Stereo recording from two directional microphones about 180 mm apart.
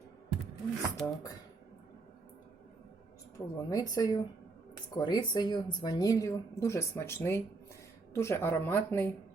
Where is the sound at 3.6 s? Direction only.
20° left (ahead or behind).